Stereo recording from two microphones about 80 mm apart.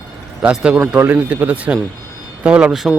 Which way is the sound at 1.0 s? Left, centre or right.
Right.